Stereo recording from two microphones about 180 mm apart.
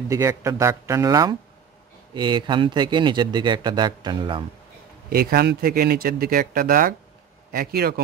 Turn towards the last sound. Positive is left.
turn(degrees=-60)  # may be behind; listen again after turning